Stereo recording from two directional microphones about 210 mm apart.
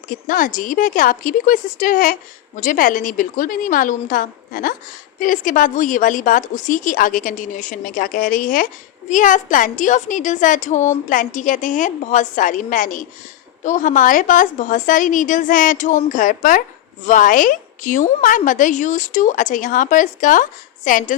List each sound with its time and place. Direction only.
0.1 s a woman's voice: 40° left (ahead or behind)